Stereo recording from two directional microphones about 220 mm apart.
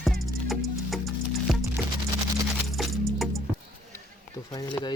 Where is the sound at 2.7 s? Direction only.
Centre (ahead or behind).